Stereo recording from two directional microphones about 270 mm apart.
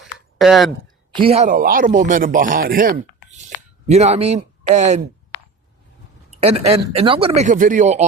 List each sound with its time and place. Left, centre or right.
0.0 s a sound: centre
1.1 s speech: right
6.4 s speech: right